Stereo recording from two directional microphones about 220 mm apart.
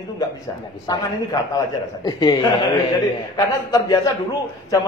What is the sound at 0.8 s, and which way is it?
A man's voice, 15° left (ahead or behind).